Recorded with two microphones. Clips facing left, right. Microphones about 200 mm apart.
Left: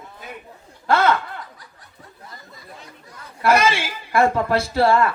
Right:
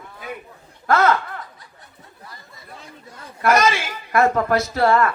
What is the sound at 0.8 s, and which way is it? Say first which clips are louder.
Speech: right 1 dB; 30° left (ahead or behind).